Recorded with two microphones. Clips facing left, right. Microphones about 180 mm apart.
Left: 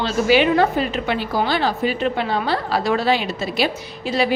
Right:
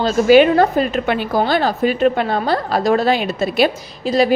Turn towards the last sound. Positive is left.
turn(degrees=-40)  # may be behind; listen again after turning